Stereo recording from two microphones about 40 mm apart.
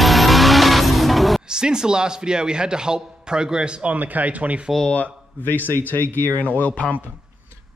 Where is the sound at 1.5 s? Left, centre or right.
Centre.